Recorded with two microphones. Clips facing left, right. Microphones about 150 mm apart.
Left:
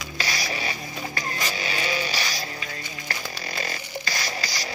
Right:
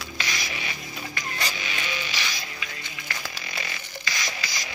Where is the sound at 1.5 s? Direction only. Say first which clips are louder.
Left 5 dB; 40° left (ahead or behind).